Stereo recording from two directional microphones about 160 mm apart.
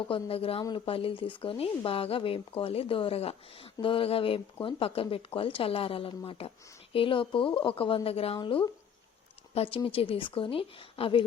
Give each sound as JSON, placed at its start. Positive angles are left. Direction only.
{"t": 0.1, "sound": "speech", "side_deg": 35}